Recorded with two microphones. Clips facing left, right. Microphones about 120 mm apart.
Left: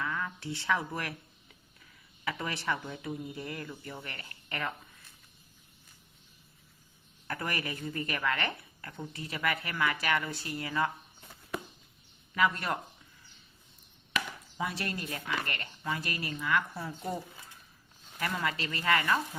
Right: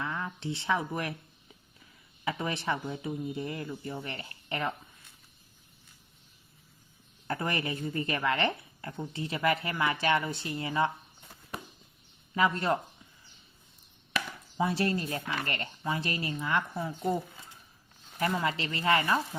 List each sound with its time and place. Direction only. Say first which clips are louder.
0.0 s speech: right 1 dB; 25° right (ahead or behind)
2.2 s a woman's voice: right 2 dB; 25° right (ahead or behind)
7.3 s a woman's voice: right 4 dB; 25° right (ahead or behind)
12.3 s a woman's voice: right 3 dB; 25° right (ahead or behind)
14.6 s a woman's voice: right 7 dB; 30° right (ahead or behind)
18.4 s a woman's voice: right 2 dB; 25° right (ahead or behind)